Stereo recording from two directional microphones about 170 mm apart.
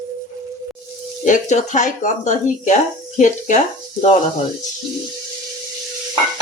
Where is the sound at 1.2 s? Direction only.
45° left (ahead or behind).